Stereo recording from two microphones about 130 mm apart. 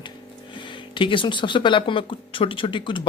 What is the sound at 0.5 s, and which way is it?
Speech, 40° left (ahead or behind).